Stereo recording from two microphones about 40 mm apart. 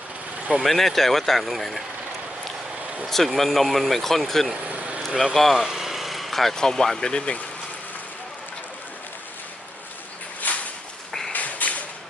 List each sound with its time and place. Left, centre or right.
0.6 s speech: centre
3.2 s speech: centre
4.6 s vehicle: right
5.0 s speech: centre
5.5 s a sound: centre
6.6 s speech: centre
10.4 s a sound: left